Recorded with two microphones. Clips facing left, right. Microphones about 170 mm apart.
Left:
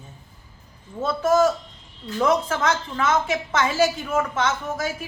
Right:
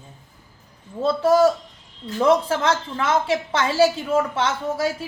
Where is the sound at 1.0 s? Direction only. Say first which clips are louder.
Right 3 dB; 30° right (ahead or behind).